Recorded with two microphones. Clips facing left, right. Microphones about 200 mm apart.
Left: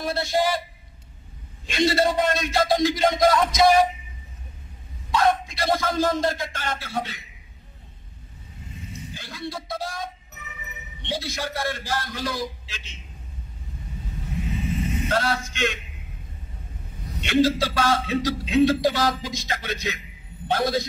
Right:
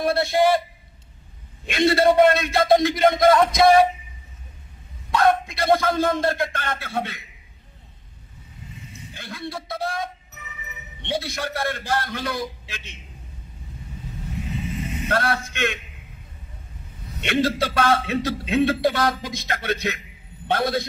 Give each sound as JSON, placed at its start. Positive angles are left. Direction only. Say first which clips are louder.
{"t": 0.0, "sound": "a man's voice", "louder": "right 4 dB", "side_deg": -60}
{"t": 1.7, "sound": "a man's voice", "louder": "right 4 dB", "side_deg": -60}
{"t": 5.1, "sound": "a man's voice", "louder": "right 2 dB", "side_deg": -60}
{"t": 9.1, "sound": "a man's voice", "louder": "right 2 dB", "side_deg": -60}
{"t": 15.0, "sound": "a man's voice", "louder": "right 3 dB", "side_deg": -60}
{"t": 17.2, "sound": "a man's voice", "louder": "left 2 dB", "side_deg": -60}